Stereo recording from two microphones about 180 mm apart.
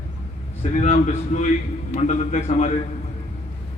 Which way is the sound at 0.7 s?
40° left (ahead or behind).